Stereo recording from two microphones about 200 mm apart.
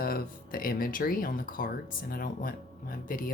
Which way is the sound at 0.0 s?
45° left (ahead or behind).